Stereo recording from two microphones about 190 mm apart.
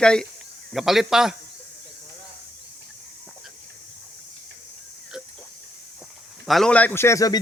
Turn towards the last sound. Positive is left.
turn(degrees=15)  # may be behind; listen again after turning